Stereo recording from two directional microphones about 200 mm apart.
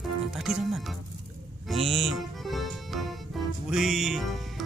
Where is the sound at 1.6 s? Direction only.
Centre (ahead or behind).